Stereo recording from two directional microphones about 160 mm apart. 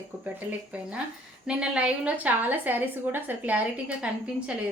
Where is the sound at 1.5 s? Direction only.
5° right (ahead or behind).